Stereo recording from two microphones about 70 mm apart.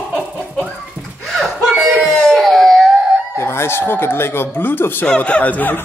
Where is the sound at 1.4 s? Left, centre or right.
Centre.